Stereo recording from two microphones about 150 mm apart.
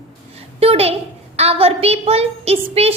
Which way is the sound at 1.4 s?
40° right (ahead or behind).